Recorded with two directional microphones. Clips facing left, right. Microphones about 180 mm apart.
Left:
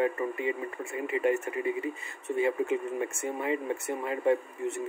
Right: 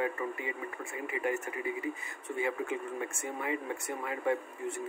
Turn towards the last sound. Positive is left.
turn(degrees=25)  # may be behind; listen again after turning